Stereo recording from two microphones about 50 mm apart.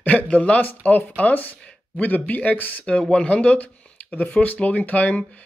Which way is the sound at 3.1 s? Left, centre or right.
Left.